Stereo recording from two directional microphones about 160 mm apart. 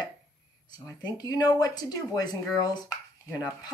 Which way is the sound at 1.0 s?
25° left (ahead or behind).